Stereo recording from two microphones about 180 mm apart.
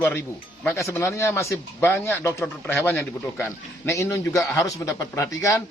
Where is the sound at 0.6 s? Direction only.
15° left (ahead or behind).